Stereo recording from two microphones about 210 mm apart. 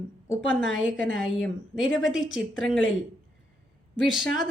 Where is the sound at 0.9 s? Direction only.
65° left (ahead or behind).